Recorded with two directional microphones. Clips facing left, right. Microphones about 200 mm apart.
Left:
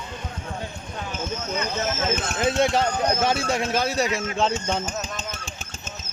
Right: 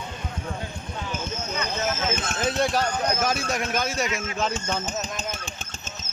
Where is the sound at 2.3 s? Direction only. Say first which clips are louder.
Left 3 dB; 20° left (ahead or behind).